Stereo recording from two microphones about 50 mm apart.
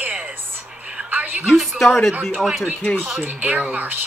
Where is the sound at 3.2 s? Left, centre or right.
Right.